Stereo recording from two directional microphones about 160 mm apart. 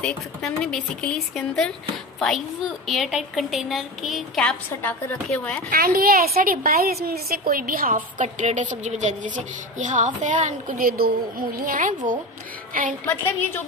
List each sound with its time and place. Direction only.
0.0 s a woman's voice: 5° left (ahead or behind)
5.7 s a woman's voice: 65° right (ahead or behind)
13.0 s a woman's voice: 15° left (ahead or behind)